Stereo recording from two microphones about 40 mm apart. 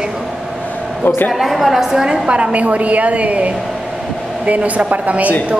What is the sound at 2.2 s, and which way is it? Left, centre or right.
A woman's voice, right.